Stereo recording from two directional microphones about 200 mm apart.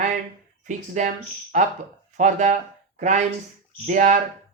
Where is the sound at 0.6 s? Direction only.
40° right (ahead or behind).